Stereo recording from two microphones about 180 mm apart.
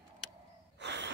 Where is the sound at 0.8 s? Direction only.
75° right (ahead or behind).